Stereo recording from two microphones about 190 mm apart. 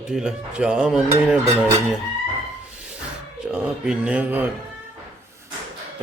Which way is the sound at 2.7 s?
5° right (ahead or behind).